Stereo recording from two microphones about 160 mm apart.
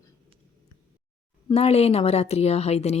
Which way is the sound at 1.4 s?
40° left (ahead or behind).